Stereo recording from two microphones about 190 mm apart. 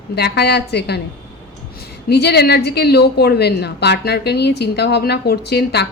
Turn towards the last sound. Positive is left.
turn(degrees=60)  # may be behind; listen again after turning